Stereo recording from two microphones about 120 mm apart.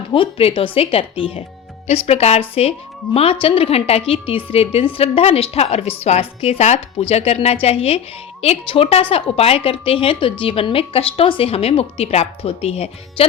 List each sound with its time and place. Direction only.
0.1 s a woman's voice: 50° left (ahead or behind)